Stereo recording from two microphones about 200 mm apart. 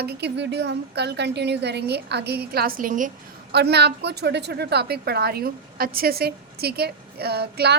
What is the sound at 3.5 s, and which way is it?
A woman's voice, 55° right (ahead or behind).